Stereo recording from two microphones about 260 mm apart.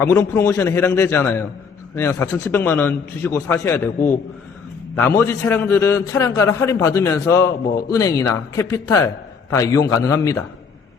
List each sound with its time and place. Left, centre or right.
0.0 s a man's voice: centre